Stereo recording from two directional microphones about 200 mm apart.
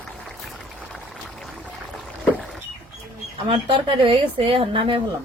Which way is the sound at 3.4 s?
25° right (ahead or behind).